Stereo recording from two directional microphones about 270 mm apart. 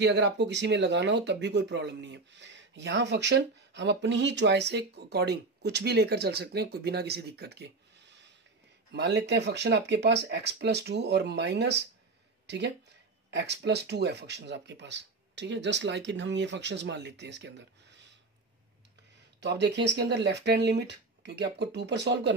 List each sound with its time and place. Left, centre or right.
0.0 s speech: right
8.9 s speech: right
19.4 s speech: right